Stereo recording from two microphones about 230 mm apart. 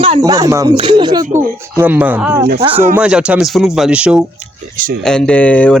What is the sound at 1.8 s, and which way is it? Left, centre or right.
Speech, centre.